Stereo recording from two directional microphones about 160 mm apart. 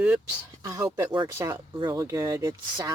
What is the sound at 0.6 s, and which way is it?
Speech, 20° right (ahead or behind).